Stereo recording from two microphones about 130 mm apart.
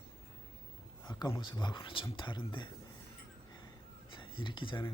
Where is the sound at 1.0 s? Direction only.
35° left (ahead or behind).